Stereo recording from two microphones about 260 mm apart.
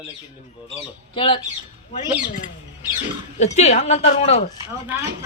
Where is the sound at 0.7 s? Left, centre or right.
Centre.